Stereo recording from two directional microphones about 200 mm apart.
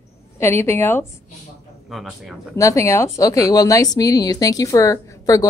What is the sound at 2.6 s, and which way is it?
A woman's voice, 15° left (ahead or behind).